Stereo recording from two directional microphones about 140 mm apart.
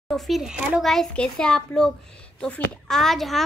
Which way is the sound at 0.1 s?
Centre (ahead or behind).